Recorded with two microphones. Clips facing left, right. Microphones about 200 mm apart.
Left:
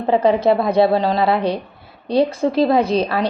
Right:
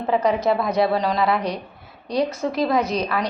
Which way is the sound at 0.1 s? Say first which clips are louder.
Left 5 dB; 30° left (ahead or behind).